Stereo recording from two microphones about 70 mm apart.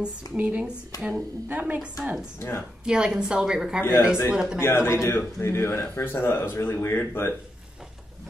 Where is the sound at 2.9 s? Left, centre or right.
Centre.